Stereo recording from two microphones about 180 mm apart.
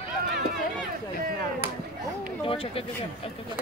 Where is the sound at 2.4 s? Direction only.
30° left (ahead or behind).